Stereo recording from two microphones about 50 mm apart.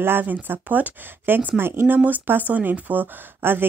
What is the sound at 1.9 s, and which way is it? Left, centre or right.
Speech, right.